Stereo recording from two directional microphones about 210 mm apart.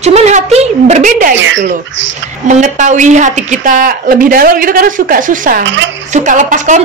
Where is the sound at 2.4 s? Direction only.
35° right (ahead or behind).